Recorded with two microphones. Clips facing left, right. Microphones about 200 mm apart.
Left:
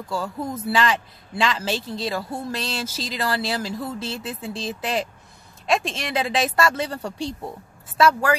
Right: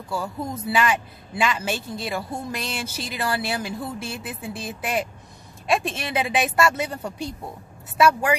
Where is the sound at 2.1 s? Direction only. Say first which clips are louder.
Left 1 dB; 15° right (ahead or behind).